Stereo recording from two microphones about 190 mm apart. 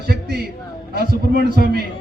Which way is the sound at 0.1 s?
55° right (ahead or behind).